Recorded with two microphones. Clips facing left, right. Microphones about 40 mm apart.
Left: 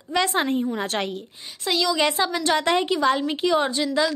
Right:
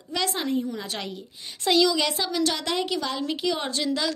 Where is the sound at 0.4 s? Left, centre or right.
Left.